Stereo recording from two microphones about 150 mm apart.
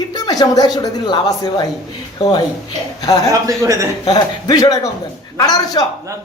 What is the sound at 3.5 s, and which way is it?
Speech, 20° right (ahead or behind).